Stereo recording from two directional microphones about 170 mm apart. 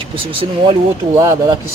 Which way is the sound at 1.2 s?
20° right (ahead or behind).